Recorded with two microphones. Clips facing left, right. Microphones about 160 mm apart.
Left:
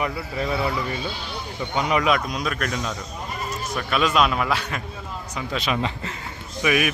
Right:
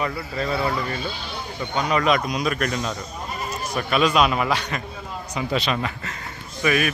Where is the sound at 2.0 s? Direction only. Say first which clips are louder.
Right 1 dB; 5° left (ahead or behind).